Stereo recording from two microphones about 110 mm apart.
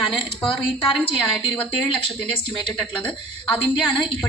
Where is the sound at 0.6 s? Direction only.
55° left (ahead or behind).